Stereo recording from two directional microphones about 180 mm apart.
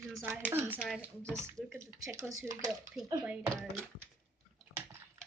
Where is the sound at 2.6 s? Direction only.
Centre (ahead or behind).